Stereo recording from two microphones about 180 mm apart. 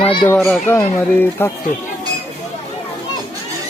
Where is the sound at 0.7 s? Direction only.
15° left (ahead or behind).